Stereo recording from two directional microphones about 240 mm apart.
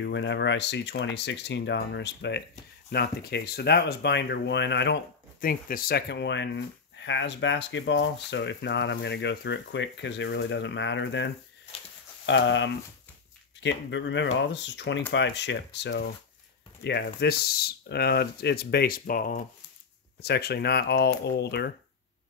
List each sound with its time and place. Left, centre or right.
0.0 s speech: left